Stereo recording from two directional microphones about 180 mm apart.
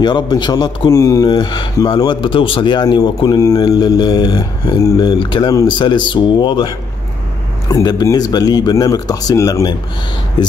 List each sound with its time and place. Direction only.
0.0 s speech: 25° left (ahead or behind)